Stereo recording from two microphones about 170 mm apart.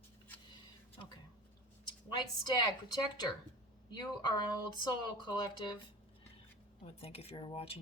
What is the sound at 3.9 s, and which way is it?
Speech, 25° left (ahead or behind).